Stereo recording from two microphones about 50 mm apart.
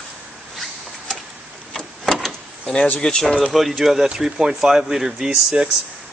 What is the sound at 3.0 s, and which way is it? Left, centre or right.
Speech, centre.